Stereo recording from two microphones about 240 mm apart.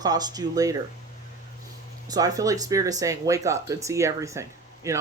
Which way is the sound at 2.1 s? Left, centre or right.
Centre.